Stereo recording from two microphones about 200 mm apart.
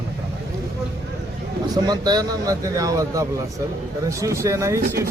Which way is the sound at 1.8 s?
20° right (ahead or behind).